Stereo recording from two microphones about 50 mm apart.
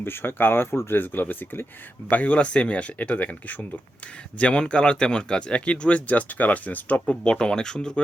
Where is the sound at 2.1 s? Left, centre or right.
Left.